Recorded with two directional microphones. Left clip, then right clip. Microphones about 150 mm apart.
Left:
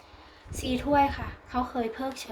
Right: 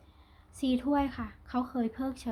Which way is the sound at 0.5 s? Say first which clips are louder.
Left 5 dB; 45° right (ahead or behind).